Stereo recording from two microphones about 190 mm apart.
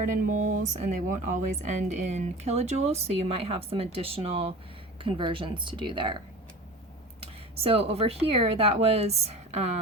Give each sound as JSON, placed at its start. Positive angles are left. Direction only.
{"t": 0.1, "sound": "speech", "side_deg": -40}